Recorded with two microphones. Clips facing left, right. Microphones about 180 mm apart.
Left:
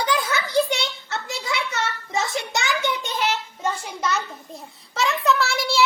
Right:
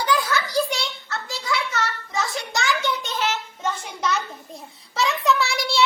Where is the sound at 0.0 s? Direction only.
20° left (ahead or behind).